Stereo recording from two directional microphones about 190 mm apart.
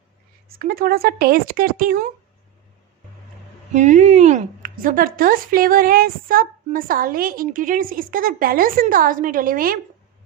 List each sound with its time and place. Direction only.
0.4 s speech: 50° right (ahead or behind)
3.7 s speech: 40° right (ahead or behind)